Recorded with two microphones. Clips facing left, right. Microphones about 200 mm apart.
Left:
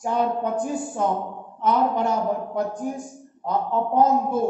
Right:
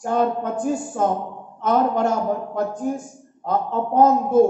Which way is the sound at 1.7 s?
50° right (ahead or behind).